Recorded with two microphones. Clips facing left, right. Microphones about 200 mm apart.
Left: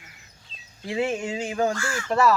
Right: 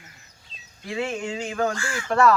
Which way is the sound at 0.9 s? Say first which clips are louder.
Left 2 dB; 15° left (ahead or behind).